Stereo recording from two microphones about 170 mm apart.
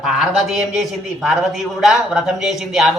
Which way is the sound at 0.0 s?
Centre (ahead or behind).